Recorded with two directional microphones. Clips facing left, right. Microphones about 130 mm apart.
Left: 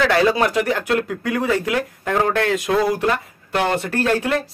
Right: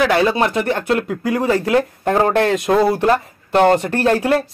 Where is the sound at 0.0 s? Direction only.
25° right (ahead or behind).